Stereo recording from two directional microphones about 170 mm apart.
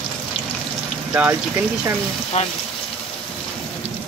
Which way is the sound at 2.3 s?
40° left (ahead or behind).